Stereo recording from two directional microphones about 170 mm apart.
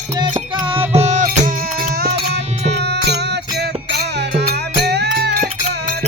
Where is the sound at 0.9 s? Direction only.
45° right (ahead or behind).